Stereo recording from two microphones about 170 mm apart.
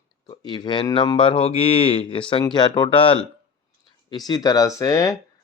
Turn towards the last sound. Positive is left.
turn(degrees=20)  # may be behind; listen again after turning